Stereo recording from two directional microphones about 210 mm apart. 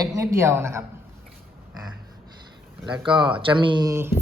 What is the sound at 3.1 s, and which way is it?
Speech, 20° right (ahead or behind).